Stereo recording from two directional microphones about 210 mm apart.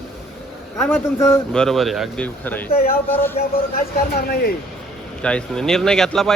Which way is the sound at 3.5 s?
45° left (ahead or behind).